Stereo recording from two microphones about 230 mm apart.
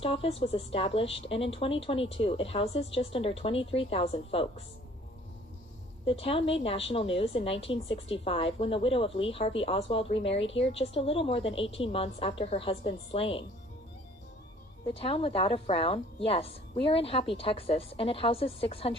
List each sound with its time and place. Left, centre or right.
0.0 s a woman's voice: left
6.1 s a woman's voice: left
14.8 s a woman's voice: left